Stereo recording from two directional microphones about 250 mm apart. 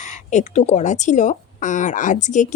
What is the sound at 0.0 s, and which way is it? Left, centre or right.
Speech, left.